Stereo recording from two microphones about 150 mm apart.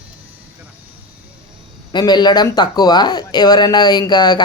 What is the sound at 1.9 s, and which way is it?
Speech, 30° left (ahead or behind).